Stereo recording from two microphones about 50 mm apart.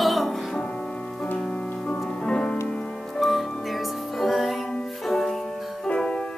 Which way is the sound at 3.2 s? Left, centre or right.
Centre.